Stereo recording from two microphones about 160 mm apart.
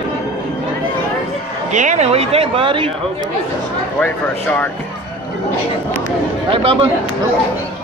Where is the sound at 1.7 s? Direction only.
50° right (ahead or behind); by 2.9 s 35° right (ahead or behind).